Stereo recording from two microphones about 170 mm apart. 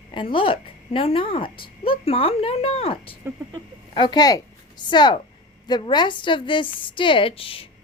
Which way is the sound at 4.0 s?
25° left (ahead or behind).